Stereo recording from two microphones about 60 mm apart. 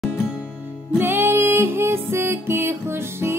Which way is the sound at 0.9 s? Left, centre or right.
Right.